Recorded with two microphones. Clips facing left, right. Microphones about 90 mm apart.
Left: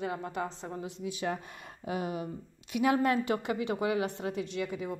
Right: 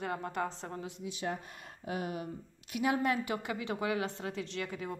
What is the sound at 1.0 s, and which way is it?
Speech, 90° left.